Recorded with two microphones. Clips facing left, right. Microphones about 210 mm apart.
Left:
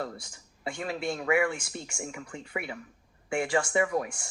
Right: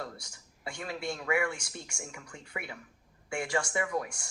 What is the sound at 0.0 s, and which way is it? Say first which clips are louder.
Speech: left 5 dB; 25° left (ahead or behind).